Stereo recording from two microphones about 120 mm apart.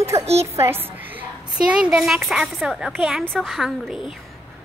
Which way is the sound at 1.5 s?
5° right (ahead or behind).